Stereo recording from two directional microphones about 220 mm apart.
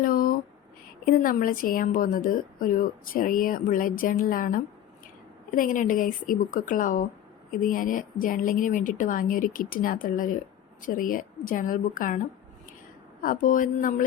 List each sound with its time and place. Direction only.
0.0 s a sound: 40° left (ahead or behind)
1.0 s a woman's voice: 40° left (ahead or behind)
13.2 s a woman's voice: 40° left (ahead or behind)